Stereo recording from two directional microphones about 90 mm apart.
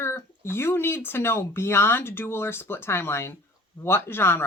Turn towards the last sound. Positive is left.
turn(degrees=25)  # may be behind; listen again after turning